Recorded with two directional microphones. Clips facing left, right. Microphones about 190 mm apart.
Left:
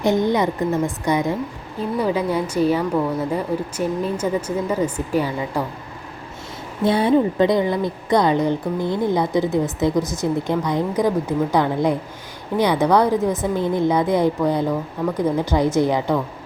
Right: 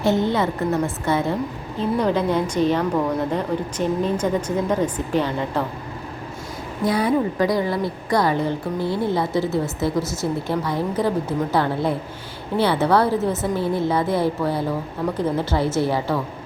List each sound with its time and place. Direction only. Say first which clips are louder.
0.0 s a woman's voice: left 2 dB; 15° left (ahead or behind)
6.8 s a woman's voice: left 3 dB; 25° left (ahead or behind)